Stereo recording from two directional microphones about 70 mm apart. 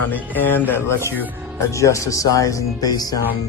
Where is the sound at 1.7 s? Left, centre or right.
Left.